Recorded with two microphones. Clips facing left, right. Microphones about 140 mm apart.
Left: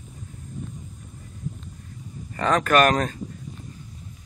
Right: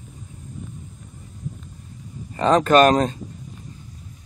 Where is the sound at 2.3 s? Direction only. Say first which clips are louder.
Right 4 dB; 25° right (ahead or behind).